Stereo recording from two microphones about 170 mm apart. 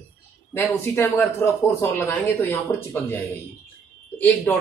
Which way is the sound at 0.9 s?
15° left (ahead or behind).